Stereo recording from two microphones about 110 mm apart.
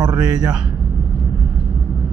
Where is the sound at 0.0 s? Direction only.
35° right (ahead or behind).